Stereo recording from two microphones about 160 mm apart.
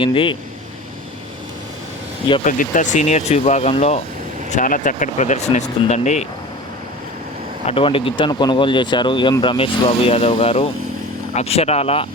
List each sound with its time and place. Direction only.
0.0 s speech: 30° left (ahead or behind)
2.4 s speech: 55° left (ahead or behind); by 4.0 s 40° left (ahead or behind)
4.5 s speech: 55° left (ahead or behind)
7.7 s speech: 35° left (ahead or behind)